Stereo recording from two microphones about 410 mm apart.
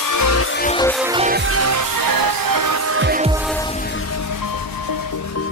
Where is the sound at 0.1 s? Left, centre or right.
Left.